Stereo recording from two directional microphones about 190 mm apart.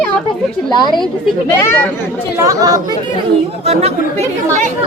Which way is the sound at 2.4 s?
20° right (ahead or behind).